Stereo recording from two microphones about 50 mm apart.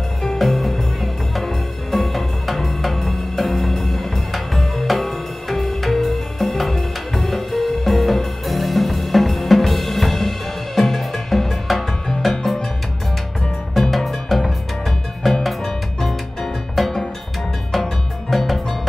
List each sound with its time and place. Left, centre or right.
0.4 s music: centre
13.7 s music: centre
18.3 s music: centre